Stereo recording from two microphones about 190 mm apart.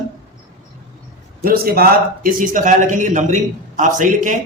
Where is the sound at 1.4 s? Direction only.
50° right (ahead or behind).